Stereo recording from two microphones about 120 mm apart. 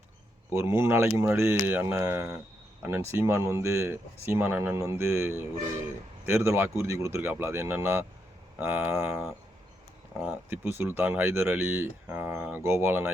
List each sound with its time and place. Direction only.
0.5 s speech: 20° right (ahead or behind)